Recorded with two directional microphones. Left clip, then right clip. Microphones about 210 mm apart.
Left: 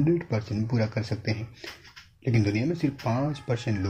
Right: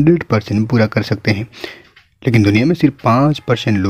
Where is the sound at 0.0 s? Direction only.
50° right (ahead or behind).